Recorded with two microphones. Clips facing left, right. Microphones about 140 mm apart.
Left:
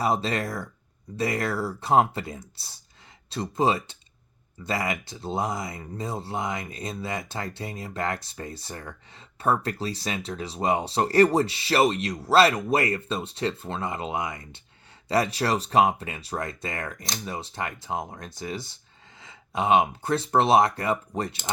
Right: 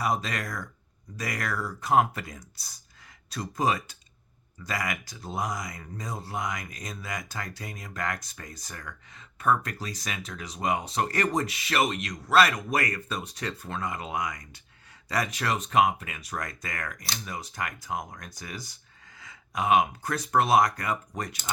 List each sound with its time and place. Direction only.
0.0 s speech: 30° left (ahead or behind)